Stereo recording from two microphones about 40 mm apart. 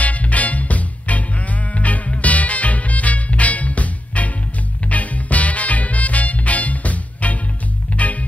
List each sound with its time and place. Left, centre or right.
0.0 s music: left